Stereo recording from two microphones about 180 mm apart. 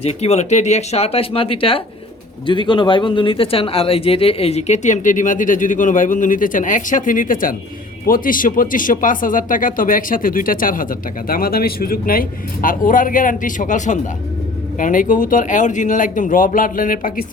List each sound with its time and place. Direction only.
0.0 s speech: 35° left (ahead or behind)